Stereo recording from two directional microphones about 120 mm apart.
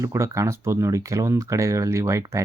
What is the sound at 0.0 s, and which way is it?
Speech, 25° right (ahead or behind).